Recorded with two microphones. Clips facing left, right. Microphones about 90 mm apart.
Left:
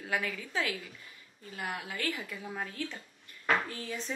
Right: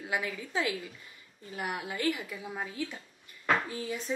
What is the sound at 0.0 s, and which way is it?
A woman's voice, 20° right (ahead or behind).